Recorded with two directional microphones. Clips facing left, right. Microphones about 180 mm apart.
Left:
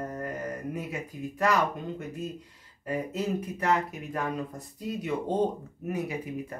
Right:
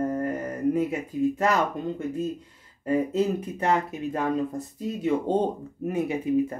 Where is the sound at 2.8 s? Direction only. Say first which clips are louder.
Right 7 dB; 25° right (ahead or behind).